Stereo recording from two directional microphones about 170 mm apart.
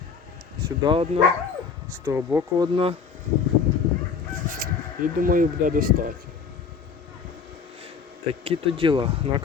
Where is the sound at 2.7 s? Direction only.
35° right (ahead or behind).